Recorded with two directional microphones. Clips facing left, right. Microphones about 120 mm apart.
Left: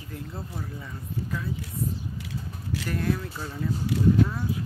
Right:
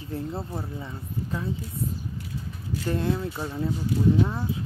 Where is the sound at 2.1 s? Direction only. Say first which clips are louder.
Even; 90° left.